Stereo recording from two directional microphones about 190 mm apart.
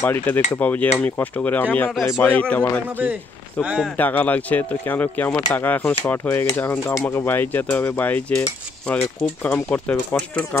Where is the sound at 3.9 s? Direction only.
10° left (ahead or behind).